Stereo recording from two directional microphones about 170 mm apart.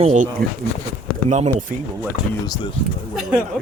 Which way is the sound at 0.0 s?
45° right (ahead or behind).